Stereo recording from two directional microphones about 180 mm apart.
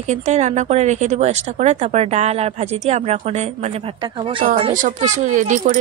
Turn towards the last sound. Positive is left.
turn(degrees=-45)  # may be behind; listen again after turning